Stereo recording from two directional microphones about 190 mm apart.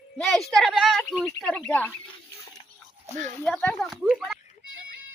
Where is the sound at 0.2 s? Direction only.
Centre (ahead or behind).